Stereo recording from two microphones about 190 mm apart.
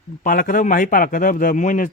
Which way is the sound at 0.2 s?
45° left (ahead or behind).